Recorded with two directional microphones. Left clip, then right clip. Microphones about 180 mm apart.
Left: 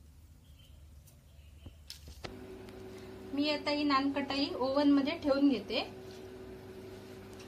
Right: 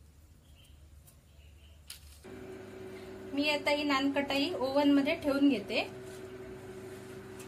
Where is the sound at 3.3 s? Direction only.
55° right (ahead or behind).